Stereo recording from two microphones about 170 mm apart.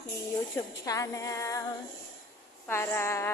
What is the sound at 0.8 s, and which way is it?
Female singing, 20° left (ahead or behind).